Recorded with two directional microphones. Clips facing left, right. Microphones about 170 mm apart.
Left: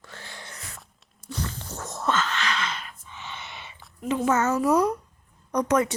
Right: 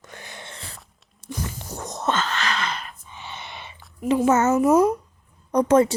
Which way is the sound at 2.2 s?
40° right (ahead or behind).